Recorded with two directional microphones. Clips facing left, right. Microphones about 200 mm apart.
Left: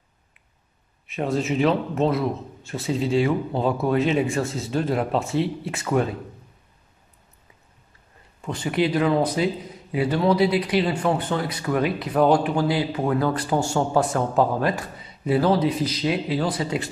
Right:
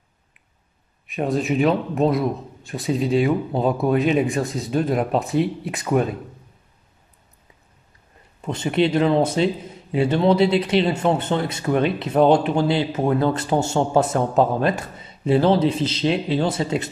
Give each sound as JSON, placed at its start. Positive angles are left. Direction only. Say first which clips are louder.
{"t": 1.0, "sound": "a man's voice", "louder": "right 2 dB", "side_deg": -15}
{"t": 8.4, "sound": "speech", "louder": "right 3 dB", "side_deg": -25}